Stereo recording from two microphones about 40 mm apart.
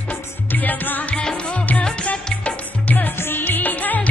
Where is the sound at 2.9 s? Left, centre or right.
Left.